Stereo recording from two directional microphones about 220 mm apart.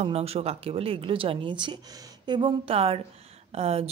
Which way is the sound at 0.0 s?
25° right (ahead or behind).